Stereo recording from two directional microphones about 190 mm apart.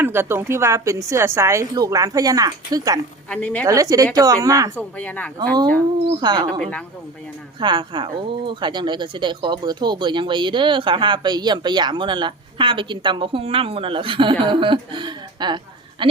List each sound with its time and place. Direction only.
0.0 s a woman's voice: 10° right (ahead or behind)
3.2 s speech: 5° left (ahead or behind)
3.7 s a woman's voice: 15° right (ahead or behind)
4.8 s speech: 5° left (ahead or behind)
6.1 s speech: 20° right (ahead or behind)
6.6 s speech: 5° left (ahead or behind)
7.6 s speech: 25° right (ahead or behind)